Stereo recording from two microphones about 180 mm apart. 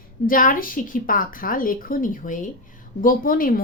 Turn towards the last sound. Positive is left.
turn(degrees=50)  # may be behind; listen again after turning